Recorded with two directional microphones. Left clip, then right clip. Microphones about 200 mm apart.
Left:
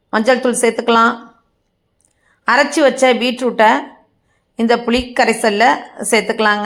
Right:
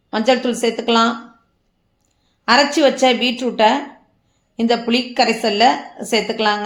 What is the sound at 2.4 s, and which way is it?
A woman's voice, 20° left (ahead or behind).